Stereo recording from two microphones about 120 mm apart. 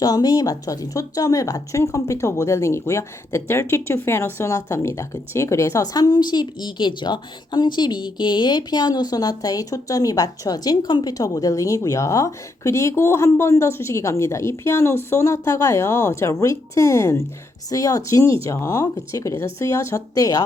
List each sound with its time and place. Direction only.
0.0 s speech: 35° left (ahead or behind)